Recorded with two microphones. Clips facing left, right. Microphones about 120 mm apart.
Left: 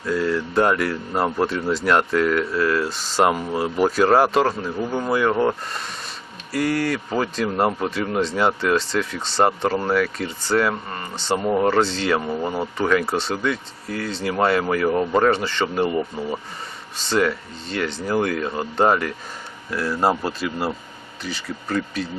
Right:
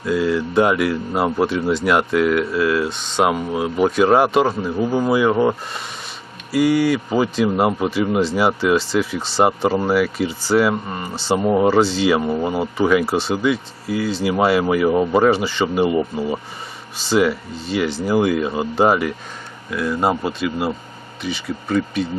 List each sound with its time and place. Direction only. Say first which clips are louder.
0.0 s speech: right 3 dB; 5° right (ahead or behind)
10.7 s speech: right 4 dB; 15° right (ahead or behind); by 21.8 s centre (ahead or behind)